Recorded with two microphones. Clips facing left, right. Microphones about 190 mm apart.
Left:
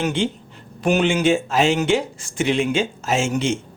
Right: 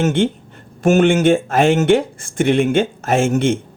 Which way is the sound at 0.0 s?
55° right (ahead or behind).